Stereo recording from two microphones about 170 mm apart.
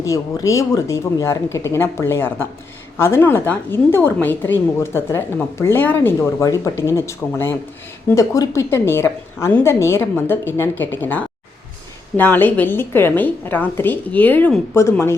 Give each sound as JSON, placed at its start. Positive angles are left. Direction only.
{"t": 0.0, "sound": "a woman's voice", "side_deg": 20}